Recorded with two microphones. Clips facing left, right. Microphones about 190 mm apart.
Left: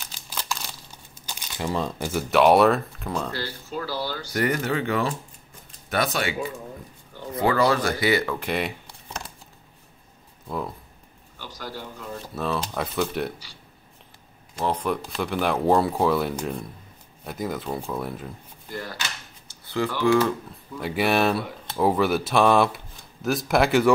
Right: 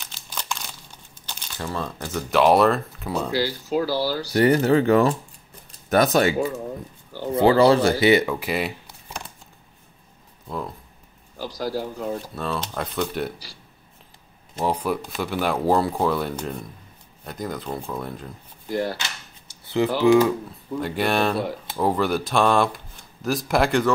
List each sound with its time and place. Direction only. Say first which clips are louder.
0.3 s crumpling: even; 5° left (ahead or behind)
1.2 s speech: left 2 dB; 10° left (ahead or behind); by 3.3 s 10° right (ahead or behind)
3.8 s speech: right 6 dB; 35° right (ahead or behind)
8.4 s speech: right 1 dB; 5° right (ahead or behind)
11.3 s speech: right 9 dB; 35° right (ahead or behind)
12.4 s speech: left 1 dB; centre (ahead or behind)
14.6 s speech: right 1 dB; 10° right (ahead or behind)
19.4 s speech: right 4 dB; 20° right (ahead or behind)
20.8 s speech: left 1 dB; 5° left (ahead or behind)